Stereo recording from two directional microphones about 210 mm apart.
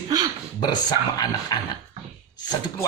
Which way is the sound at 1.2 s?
20° left (ahead or behind).